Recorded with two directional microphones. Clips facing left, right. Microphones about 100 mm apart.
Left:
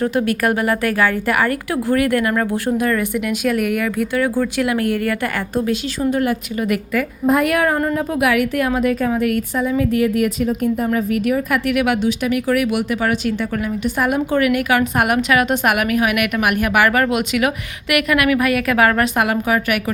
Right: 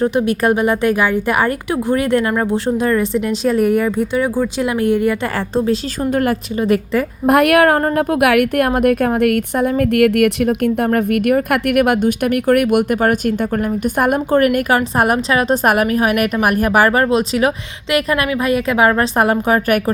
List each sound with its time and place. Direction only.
0.0 s a woman's voice: 20° right (ahead or behind)
6.0 s a woman's voice: 45° right (ahead or behind)
6.6 s a woman's voice: 30° right (ahead or behind)
7.3 s a woman's voice: 70° right (ahead or behind); by 19.8 s 40° right (ahead or behind)